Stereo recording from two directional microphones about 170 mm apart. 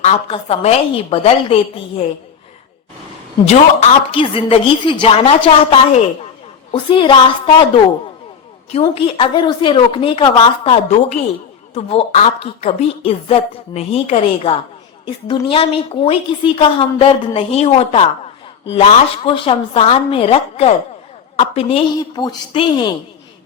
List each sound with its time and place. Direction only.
0.0 s a woman's voice: 40° left (ahead or behind)
3.4 s a woman's voice: 40° left (ahead or behind)
8.8 s a woman's voice: 30° left (ahead or behind)